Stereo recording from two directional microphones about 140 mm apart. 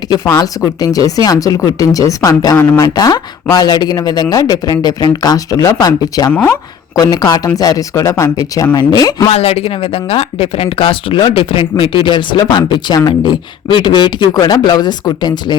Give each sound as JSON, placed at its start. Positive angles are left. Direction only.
{"t": 0.1, "sound": "speech", "side_deg": 25}
{"t": 9.3, "sound": "speech", "side_deg": 50}